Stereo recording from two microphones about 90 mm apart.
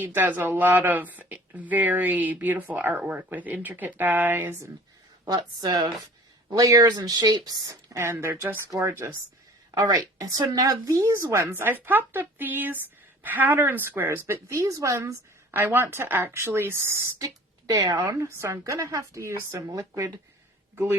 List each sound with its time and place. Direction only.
0.0 s speech: 20° right (ahead or behind)
5.2 s speech: 50° right (ahead or behind)
7.9 s a woman's voice: 30° right (ahead or behind)